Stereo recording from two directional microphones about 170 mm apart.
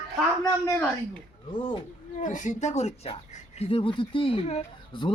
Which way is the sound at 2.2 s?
45° left (ahead or behind).